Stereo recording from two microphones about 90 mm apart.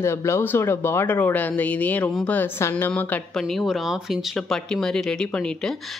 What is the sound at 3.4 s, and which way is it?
Speech, centre (ahead or behind).